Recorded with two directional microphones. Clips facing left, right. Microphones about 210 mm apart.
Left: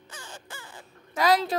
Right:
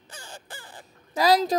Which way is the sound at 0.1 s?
35° right (ahead or behind).